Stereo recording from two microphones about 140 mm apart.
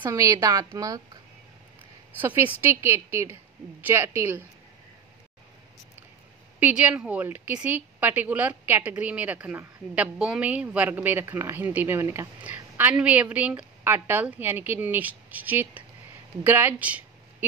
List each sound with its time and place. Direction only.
0.0 s a woman's voice: 20° right (ahead or behind)
2.1 s a woman's voice: 15° right (ahead or behind)
6.6 s a woman's voice: 10° right (ahead or behind)